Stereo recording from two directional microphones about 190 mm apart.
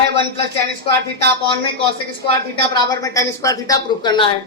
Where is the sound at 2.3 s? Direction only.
55° right (ahead or behind).